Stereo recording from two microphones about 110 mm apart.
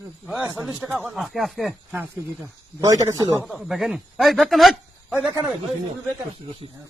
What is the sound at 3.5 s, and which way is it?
Speech, centre (ahead or behind).